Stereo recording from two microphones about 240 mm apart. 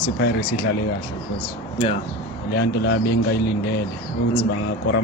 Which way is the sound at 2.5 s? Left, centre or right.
Left.